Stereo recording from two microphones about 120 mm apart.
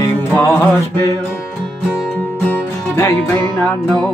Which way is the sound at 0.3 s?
15° left (ahead or behind).